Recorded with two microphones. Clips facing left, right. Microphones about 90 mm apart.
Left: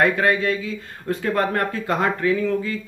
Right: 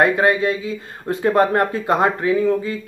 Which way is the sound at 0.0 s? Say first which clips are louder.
Right 3 dB; 20° right (ahead or behind).